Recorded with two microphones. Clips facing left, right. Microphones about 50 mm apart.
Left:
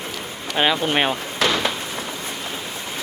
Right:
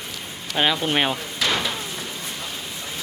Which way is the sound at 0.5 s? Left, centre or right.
Centre.